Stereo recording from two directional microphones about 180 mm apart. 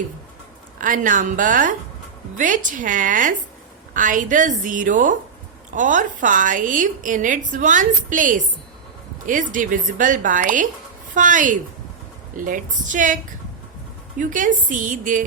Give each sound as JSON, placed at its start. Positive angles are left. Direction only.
{"t": 0.8, "sound": "a woman's voice", "side_deg": -45}
{"t": 14.2, "sound": "a woman's voice", "side_deg": -45}